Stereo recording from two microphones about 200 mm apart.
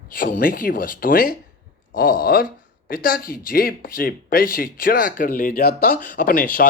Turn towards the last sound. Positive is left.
turn(degrees=45)  # may be behind; listen again after turning